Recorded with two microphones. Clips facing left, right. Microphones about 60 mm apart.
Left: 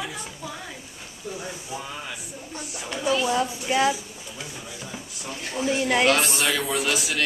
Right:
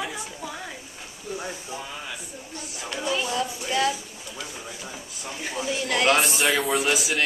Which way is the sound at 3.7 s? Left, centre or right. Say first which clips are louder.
Left 2 dB; centre.